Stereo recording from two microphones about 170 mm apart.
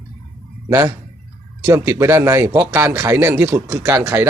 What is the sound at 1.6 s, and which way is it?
Speech, 15° right (ahead or behind).